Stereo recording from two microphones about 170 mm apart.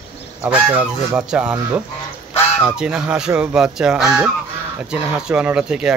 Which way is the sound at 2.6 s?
5° right (ahead or behind).